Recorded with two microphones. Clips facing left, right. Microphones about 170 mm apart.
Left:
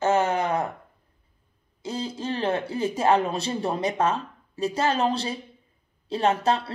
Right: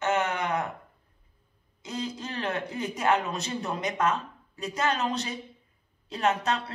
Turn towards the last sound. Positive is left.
turn(degrees=30)  # may be behind; listen again after turning